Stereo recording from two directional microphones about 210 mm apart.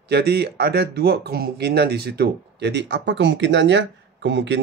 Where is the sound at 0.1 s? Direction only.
50° right (ahead or behind).